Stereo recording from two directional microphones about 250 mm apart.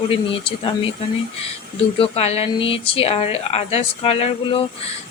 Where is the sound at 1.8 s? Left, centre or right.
Left.